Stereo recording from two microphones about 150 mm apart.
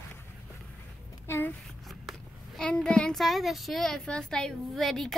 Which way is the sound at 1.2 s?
15° left (ahead or behind).